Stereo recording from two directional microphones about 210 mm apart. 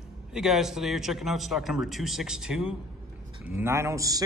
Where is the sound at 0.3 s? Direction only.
Centre (ahead or behind).